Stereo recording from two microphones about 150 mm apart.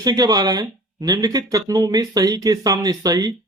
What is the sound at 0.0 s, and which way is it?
Speech, 25° right (ahead or behind).